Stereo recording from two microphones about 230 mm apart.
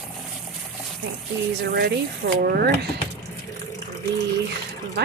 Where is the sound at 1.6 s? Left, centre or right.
Right.